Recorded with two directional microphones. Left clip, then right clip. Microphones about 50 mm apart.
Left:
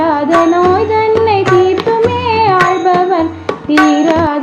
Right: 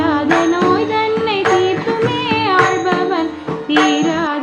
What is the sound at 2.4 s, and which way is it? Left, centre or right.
Music, right.